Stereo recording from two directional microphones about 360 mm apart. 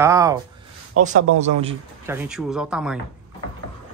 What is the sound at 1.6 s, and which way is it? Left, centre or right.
Speech, centre.